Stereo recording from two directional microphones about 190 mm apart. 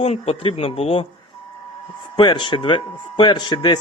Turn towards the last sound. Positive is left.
turn(degrees=25)  # may be behind; listen again after turning